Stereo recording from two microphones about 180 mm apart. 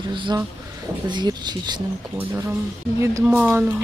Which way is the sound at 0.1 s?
25° right (ahead or behind).